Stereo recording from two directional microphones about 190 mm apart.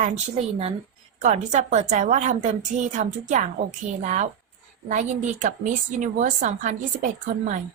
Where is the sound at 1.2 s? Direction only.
40° right (ahead or behind).